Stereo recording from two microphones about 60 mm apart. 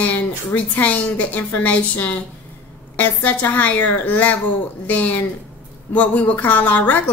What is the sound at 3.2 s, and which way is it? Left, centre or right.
A woman's voice, left.